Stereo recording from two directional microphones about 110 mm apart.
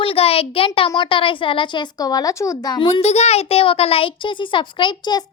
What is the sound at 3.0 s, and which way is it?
A child's voice, 80° left.